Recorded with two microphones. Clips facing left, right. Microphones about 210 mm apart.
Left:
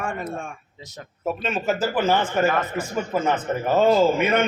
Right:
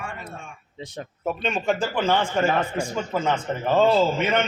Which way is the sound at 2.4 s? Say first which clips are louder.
Left 1 dB; 30° right (ahead or behind).